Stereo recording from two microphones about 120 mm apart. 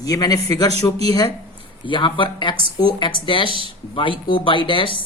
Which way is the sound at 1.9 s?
45° left (ahead or behind).